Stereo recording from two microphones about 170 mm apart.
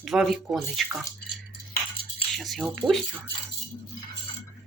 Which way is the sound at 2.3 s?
Centre (ahead or behind).